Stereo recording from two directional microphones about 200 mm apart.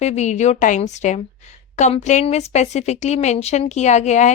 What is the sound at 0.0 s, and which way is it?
A woman's voice, 35° left (ahead or behind).